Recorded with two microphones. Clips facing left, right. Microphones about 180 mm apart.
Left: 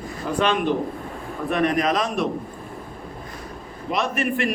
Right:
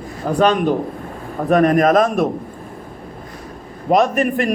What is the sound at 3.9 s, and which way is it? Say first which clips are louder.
Speech: right 9 dB; 45° right (ahead or behind).